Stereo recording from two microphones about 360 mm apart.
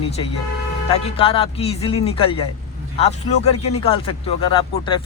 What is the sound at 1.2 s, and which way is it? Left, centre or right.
Speech, centre.